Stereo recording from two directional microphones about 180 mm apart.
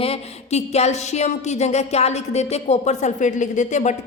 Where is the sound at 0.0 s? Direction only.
35° left (ahead or behind).